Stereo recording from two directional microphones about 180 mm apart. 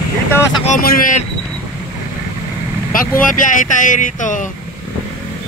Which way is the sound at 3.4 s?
45° left (ahead or behind).